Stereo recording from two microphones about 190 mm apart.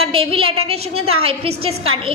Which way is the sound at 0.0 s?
30° right (ahead or behind).